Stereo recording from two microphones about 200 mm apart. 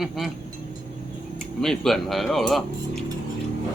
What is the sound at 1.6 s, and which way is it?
Speech, centre (ahead or behind).